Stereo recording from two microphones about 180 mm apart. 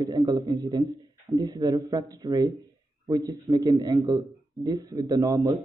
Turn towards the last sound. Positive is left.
turn(degrees=-20)  # may be behind; listen again after turning